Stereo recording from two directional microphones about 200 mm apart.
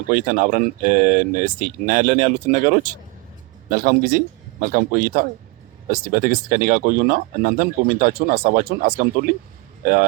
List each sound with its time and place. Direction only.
0.1 s speech: 40° right (ahead or behind)